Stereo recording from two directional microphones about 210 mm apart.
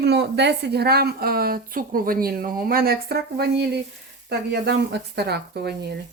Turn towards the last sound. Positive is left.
turn(degrees=-50)  # may be behind; listen again after turning